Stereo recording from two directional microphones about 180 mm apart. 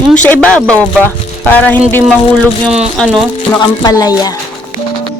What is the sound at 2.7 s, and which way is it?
Speech, 5° right (ahead or behind).